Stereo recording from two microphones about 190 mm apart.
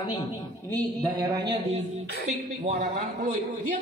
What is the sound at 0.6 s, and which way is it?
Speech, 20° right (ahead or behind).